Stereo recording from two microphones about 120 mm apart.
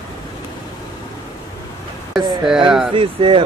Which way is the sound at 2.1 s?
5° right (ahead or behind).